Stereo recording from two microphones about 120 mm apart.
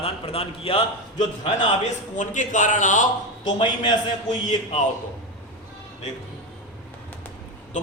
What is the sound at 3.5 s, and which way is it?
Speech, 45° left (ahead or behind).